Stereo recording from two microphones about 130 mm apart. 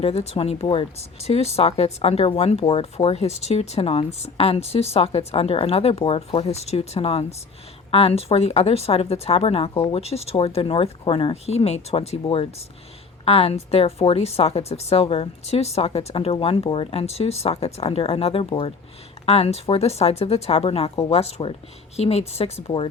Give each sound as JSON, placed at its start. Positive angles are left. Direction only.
{"t": 0.0, "sound": "speech", "side_deg": 55}